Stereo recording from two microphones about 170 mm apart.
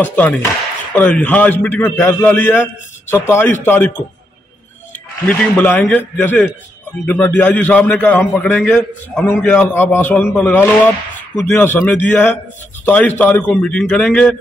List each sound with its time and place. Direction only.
0.0 s a man's voice: 10° left (ahead or behind)
5.2 s a man's voice: 10° left (ahead or behind)